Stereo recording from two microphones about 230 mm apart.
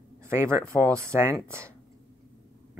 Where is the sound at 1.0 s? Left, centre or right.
Centre.